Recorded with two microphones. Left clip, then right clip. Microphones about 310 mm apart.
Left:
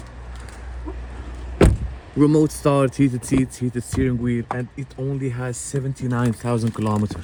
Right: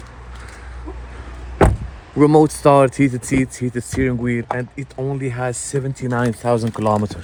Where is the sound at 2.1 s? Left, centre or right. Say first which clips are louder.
Right 5 dB; centre.